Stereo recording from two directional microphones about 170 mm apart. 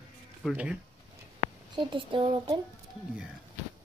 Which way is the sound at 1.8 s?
30° right (ahead or behind).